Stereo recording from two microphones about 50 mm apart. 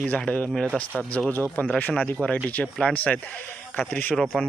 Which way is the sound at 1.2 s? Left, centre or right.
Centre.